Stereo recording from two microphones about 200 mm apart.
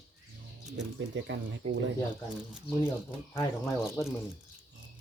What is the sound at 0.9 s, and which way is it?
Speech, 65° right (ahead or behind).